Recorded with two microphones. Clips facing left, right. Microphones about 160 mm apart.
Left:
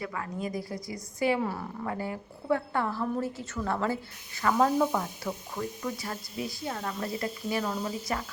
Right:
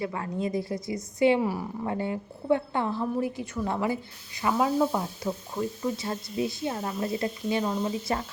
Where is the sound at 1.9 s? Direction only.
25° right (ahead or behind).